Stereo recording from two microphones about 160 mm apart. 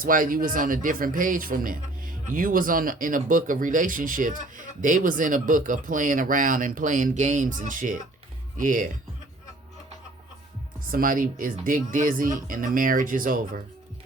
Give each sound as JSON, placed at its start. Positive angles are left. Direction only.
{"t": 0.0, "sound": "speech", "side_deg": -60}
{"t": 10.8, "sound": "speech", "side_deg": -60}